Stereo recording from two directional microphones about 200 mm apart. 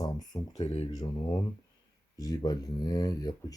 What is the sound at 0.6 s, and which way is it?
Speech, 30° left (ahead or behind).